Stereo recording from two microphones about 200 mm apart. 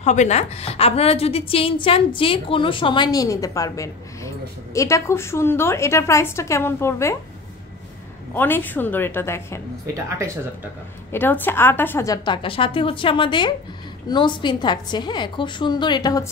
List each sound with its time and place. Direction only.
0.0 s a woman's voice: 35° left (ahead or behind); by 7.2 s 15° left (ahead or behind)
8.4 s a woman's voice: 10° left (ahead or behind)
9.9 s speech: 15° right (ahead or behind)
11.1 s a woman's voice: 10° left (ahead or behind)